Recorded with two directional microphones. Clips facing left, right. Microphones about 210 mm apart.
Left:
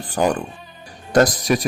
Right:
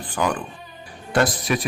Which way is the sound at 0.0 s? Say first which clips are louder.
Left 4 dB; 45° left (ahead or behind).